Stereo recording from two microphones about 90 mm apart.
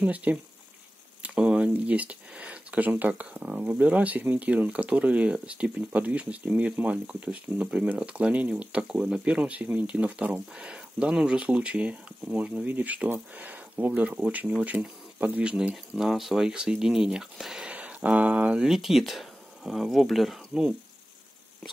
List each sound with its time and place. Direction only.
0.0 s speech: 15° right (ahead or behind)